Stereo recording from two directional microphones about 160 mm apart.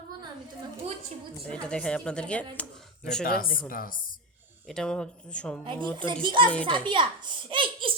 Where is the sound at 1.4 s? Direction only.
5° left (ahead or behind).